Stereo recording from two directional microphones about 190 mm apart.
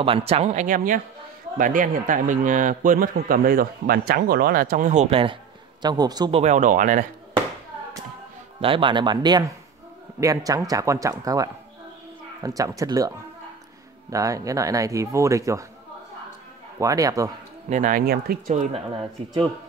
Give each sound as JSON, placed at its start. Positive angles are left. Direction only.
{"t": 0.0, "sound": "a man's voice", "side_deg": -30}
{"t": 6.4, "sound": "a man's voice", "side_deg": -40}
{"t": 8.5, "sound": "speech", "side_deg": -25}
{"t": 14.1, "sound": "speech", "side_deg": -15}
{"t": 16.7, "sound": "speech", "side_deg": -15}
{"t": 17.6, "sound": "a man's voice", "side_deg": -40}
{"t": 18.5, "sound": "speech", "side_deg": -40}